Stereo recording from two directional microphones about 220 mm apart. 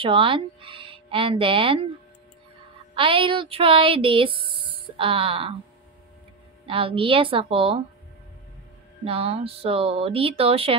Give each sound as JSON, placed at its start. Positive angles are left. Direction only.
{"t": 0.0, "sound": "speech", "side_deg": -25}
{"t": 2.9, "sound": "speech", "side_deg": -25}
{"t": 6.6, "sound": "speech", "side_deg": -25}
{"t": 9.0, "sound": "speech", "side_deg": -25}